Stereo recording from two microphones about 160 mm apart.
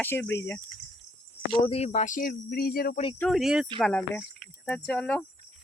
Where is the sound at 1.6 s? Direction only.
40° left (ahead or behind); by 3.0 s 70° left (ahead or behind).